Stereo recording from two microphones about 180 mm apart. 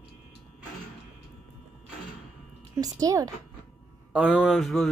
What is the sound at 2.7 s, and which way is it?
Speech, 20° right (ahead or behind).